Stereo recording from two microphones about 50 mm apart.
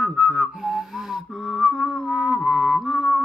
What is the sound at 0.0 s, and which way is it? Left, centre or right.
Music, centre.